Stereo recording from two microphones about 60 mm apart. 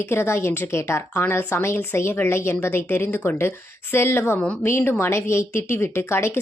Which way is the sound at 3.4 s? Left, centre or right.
Left.